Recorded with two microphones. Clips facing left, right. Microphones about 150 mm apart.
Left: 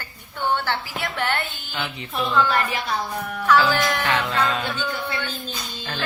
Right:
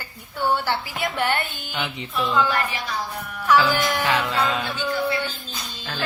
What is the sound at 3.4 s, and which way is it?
Music, 15° right (ahead or behind).